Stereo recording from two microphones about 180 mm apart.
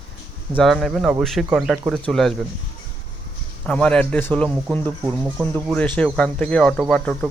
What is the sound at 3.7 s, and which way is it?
A man's voice, 5° left (ahead or behind).